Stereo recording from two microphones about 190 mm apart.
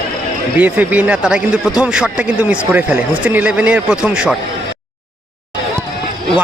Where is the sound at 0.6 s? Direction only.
5° right (ahead or behind).